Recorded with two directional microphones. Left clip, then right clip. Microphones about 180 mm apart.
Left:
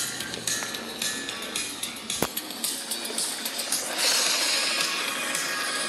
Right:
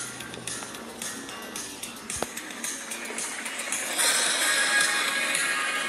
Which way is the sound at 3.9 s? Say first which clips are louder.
Left 1 dB; centre (ahead or behind).